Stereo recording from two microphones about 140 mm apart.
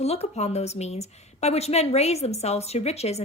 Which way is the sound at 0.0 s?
50° left (ahead or behind).